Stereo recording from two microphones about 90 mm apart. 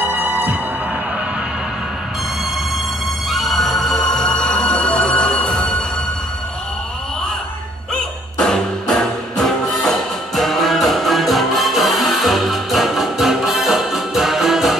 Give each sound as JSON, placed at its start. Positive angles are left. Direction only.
{"t": 0.0, "sound": "music", "side_deg": -20}
{"t": 3.3, "sound": "music", "side_deg": 0}
{"t": 7.9, "sound": "music", "side_deg": 10}